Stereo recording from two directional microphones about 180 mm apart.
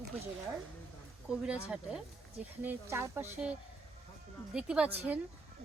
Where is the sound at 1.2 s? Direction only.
5° right (ahead or behind).